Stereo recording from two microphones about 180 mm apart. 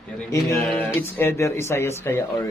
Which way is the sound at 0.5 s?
10° left (ahead or behind).